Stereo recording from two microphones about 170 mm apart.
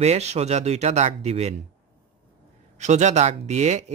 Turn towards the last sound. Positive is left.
turn(degrees=-40)  # may be behind; listen again after turning